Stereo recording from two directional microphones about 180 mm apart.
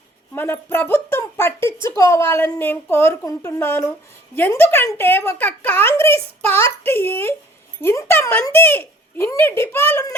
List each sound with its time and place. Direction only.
0.3 s a woman's voice: 10° left (ahead or behind)